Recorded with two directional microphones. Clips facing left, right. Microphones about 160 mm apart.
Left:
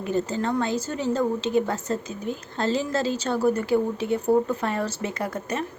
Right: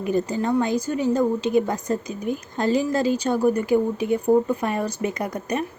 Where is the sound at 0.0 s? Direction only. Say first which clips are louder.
Right 2 dB; 15° right (ahead or behind).